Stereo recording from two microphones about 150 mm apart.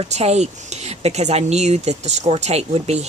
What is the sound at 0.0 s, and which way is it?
Speech, 45° right (ahead or behind).